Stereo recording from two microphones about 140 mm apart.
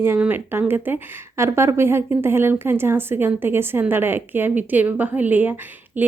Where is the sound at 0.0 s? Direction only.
15° right (ahead or behind).